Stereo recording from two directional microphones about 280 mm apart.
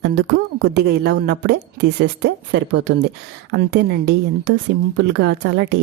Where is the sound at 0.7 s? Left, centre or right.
Right.